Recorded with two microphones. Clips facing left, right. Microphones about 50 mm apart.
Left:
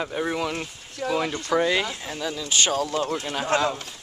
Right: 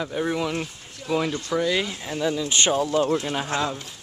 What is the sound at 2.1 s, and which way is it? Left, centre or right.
Speech, centre.